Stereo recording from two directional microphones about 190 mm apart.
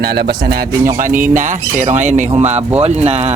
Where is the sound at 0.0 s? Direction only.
55° right (ahead or behind).